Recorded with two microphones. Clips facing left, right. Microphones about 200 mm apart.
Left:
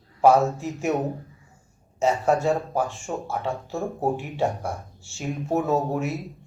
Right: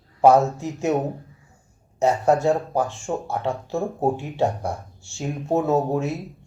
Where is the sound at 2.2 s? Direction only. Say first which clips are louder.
Right 3 dB; 20° right (ahead or behind).